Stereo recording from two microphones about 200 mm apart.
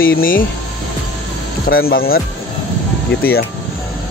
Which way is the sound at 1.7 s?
50° left (ahead or behind).